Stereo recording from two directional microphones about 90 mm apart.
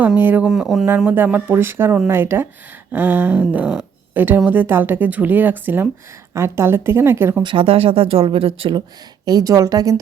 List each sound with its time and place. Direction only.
0.2 s speech: 20° right (ahead or behind)
0.4 s speech: 5° right (ahead or behind)
0.9 s speech: 20° right (ahead or behind)
7.4 s speech: 75° right (ahead or behind)
9.2 s a woman's voice: 45° right (ahead or behind)